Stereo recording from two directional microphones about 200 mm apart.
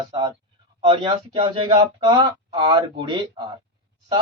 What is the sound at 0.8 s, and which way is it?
Speech, 25° right (ahead or behind).